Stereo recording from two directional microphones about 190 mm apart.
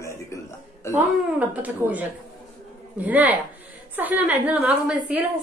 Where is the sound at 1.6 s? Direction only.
10° right (ahead or behind).